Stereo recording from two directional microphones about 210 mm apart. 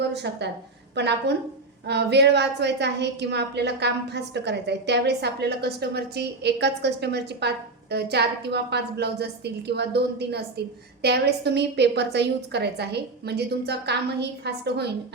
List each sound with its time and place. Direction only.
0.1 s a woman's voice: 55° right (ahead or behind)